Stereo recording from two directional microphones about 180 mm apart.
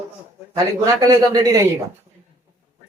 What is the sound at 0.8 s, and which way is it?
Speech, 20° right (ahead or behind).